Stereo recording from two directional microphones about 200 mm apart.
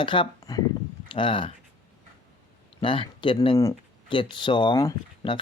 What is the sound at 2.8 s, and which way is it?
Speech, 25° left (ahead or behind).